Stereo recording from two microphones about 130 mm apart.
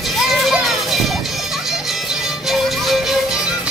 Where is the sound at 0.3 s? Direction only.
Centre (ahead or behind).